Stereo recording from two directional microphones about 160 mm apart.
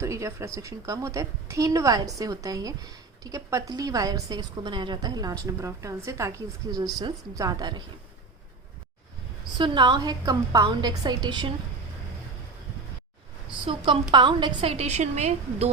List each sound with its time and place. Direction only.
0.0 s a woman's voice: 20° right (ahead or behind)
9.6 s a woman's voice: 30° right (ahead or behind)
13.5 s a woman's voice: 35° right (ahead or behind)